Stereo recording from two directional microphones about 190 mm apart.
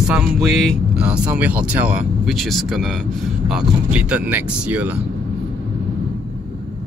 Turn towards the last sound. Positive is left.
turn(degrees=-10)  # may be behind; listen again after turning